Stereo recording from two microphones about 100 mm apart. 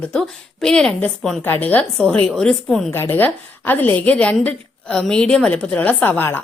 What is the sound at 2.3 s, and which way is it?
Speech, 5° left (ahead or behind).